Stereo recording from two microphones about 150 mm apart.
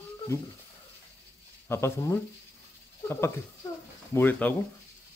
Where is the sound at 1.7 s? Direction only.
15° left (ahead or behind).